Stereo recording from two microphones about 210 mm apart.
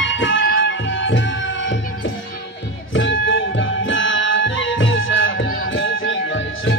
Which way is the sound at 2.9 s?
65° left (ahead or behind).